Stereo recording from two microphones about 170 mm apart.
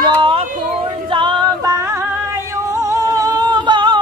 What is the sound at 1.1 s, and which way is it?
Music, 30° right (ahead or behind).